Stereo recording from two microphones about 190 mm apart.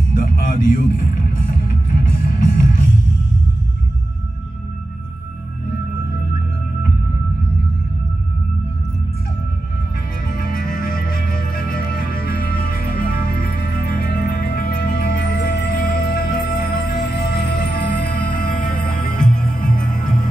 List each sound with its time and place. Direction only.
0.1 s speech: 45° left (ahead or behind)
1.7 s music: 45° left (ahead or behind)
10.2 s music: 45° left (ahead or behind)